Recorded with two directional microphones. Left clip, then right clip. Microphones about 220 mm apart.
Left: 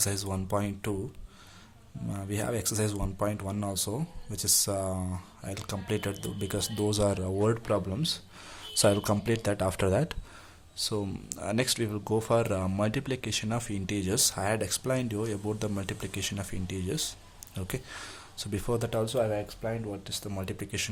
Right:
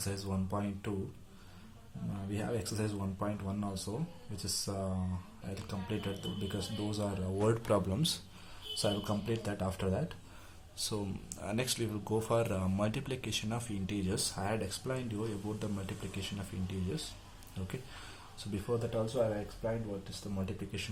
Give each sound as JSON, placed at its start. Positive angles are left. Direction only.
{"t": 0.0, "sound": "speech", "side_deg": 40}
{"t": 2.1, "sound": "speech", "side_deg": 35}
{"t": 7.5, "sound": "speech", "side_deg": 15}
{"t": 8.8, "sound": "speech", "side_deg": 35}
{"t": 10.8, "sound": "speech", "side_deg": 25}